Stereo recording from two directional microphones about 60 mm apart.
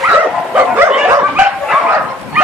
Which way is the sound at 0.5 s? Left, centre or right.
Right.